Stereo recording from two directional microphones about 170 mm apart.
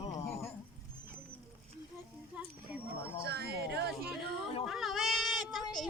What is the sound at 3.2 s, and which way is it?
Speech, 70° right (ahead or behind).